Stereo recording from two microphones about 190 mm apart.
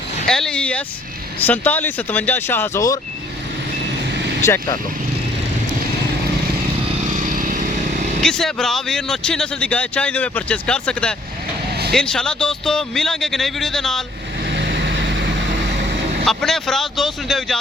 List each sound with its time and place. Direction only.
0.3 s speech: 5° left (ahead or behind)
4.4 s speech: 20° left (ahead or behind)
7.2 s vehicle: 45° right (ahead or behind)
8.2 s speech: 5° left (ahead or behind)
14.5 s vehicle: 65° right (ahead or behind)
16.2 s speech: centre (ahead or behind)